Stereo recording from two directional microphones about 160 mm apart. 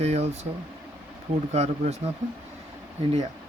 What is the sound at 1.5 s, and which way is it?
Speech, 45° right (ahead or behind).